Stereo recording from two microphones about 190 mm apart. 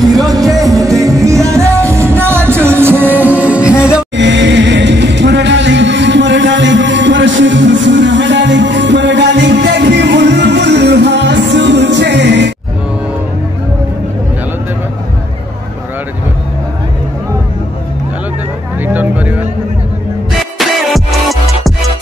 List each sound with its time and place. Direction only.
0.7 s music: 15° right (ahead or behind)
4.2 s music: 70° right (ahead or behind)
18.8 s music: 10° right (ahead or behind)
20.5 s music: centre (ahead or behind)